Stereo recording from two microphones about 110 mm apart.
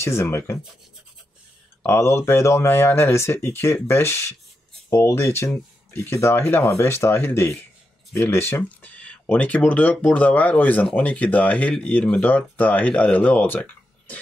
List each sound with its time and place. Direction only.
0.0 s speech: 25° left (ahead or behind)
1.8 s speech: 25° left (ahead or behind)